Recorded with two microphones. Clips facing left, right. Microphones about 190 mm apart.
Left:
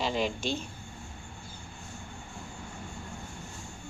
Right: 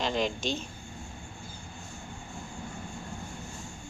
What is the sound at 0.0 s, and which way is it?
Speech, 10° left (ahead or behind).